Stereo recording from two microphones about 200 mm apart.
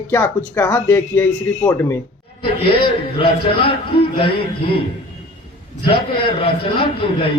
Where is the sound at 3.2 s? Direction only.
25° left (ahead or behind).